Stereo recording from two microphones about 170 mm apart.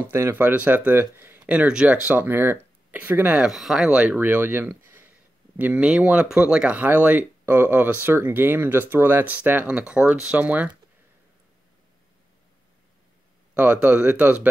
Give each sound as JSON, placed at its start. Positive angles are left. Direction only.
{"t": 0.0, "sound": "speech", "side_deg": -15}
{"t": 13.6, "sound": "speech", "side_deg": -10}